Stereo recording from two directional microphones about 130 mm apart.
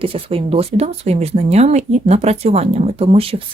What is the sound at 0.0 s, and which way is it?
Speech, 45° right (ahead or behind).